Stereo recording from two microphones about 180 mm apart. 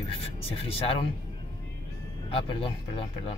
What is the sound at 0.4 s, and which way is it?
Speech, 30° left (ahead or behind).